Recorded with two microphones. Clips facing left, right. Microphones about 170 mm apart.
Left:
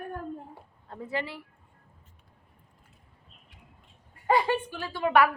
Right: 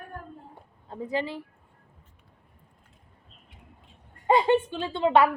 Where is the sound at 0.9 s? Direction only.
20° right (ahead or behind).